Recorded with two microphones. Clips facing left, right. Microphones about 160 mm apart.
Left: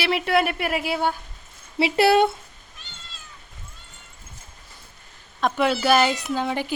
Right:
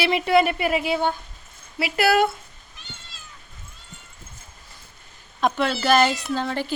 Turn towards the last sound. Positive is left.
turn(degrees=15)  # may be behind; listen again after turning